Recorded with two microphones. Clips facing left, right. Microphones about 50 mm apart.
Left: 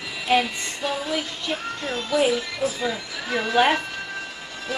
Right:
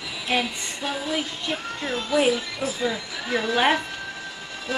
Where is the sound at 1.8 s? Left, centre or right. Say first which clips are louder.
Even; centre.